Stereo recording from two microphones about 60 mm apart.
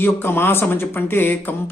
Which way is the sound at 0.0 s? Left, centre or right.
Left.